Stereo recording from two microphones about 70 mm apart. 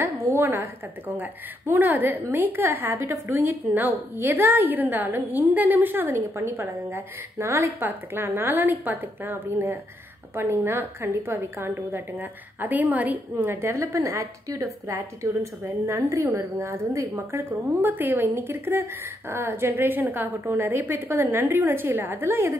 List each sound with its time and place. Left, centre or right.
0.2 s a woman's voice: right
3.6 s a woman's voice: right